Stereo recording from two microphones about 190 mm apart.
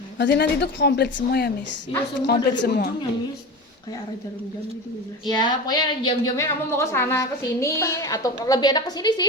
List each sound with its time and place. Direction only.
0.2 s a woman's voice: 65° left (ahead or behind)
5.2 s a woman's voice: 20° left (ahead or behind)